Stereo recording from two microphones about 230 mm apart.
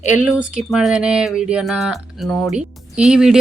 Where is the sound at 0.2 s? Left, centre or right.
Centre.